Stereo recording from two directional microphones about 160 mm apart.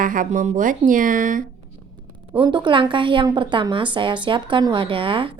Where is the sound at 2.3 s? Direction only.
30° right (ahead or behind).